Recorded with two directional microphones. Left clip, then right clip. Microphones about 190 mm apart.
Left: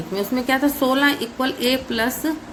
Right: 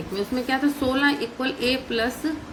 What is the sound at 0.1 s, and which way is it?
A woman's voice, 40° left (ahead or behind).